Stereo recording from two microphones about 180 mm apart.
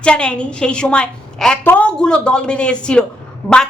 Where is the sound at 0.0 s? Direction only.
5° left (ahead or behind).